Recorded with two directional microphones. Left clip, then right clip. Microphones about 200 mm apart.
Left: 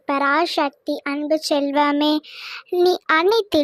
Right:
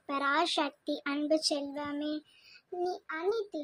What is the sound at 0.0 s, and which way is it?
A child's voice, 30° left (ahead or behind).